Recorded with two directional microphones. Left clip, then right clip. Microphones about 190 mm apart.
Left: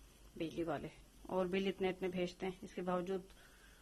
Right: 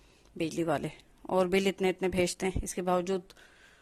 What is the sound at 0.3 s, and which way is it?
Speech, 45° right (ahead or behind).